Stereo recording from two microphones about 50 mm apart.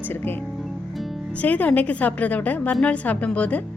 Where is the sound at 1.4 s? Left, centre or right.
Left.